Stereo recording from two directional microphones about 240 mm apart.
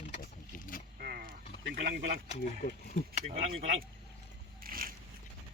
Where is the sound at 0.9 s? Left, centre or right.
Right.